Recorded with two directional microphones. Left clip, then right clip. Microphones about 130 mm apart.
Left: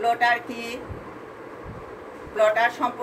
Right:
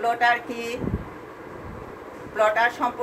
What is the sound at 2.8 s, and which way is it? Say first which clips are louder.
Speech: even; 20° right (ahead or behind).